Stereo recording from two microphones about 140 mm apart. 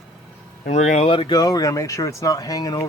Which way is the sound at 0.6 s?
55° left (ahead or behind).